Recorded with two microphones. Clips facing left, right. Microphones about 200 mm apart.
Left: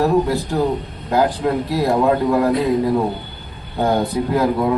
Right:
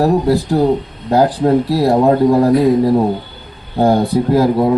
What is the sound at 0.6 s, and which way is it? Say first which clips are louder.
Speech: right 5 dB; 35° right (ahead or behind).